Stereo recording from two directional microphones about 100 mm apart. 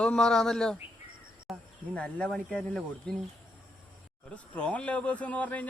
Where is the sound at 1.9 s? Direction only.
10° left (ahead or behind).